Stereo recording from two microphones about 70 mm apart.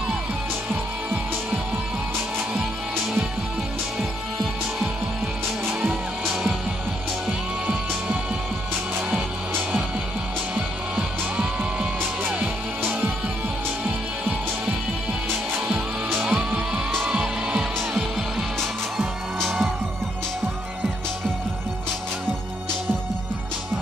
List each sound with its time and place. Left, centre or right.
10.5 s music: centre
16.2 s music: right
18.6 s music: centre